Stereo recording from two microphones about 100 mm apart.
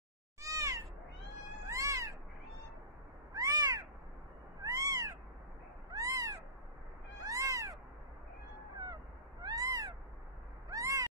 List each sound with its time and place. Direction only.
0.4 s cat: 35° right (ahead or behind)
3.3 s cat: 40° right (ahead or behind)
8.7 s cat: 40° right (ahead or behind)